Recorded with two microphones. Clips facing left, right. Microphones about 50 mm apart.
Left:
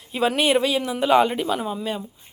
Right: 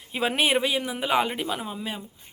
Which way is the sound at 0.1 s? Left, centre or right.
Right.